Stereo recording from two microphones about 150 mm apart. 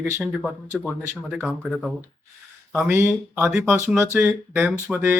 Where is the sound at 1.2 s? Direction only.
5° right (ahead or behind).